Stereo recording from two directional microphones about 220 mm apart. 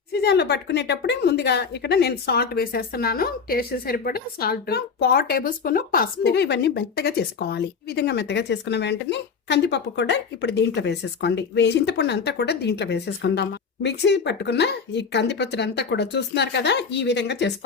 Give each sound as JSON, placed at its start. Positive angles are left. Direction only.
{"t": 0.1, "sound": "a woman's voice", "side_deg": 50}